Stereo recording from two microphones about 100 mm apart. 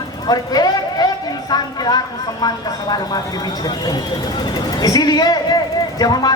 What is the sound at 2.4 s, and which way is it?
A woman's voice, 40° left (ahead or behind).